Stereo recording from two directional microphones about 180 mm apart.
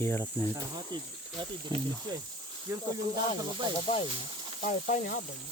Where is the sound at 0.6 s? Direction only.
25° right (ahead or behind).